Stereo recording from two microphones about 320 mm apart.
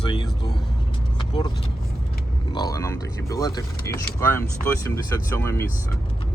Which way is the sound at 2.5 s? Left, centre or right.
Centre.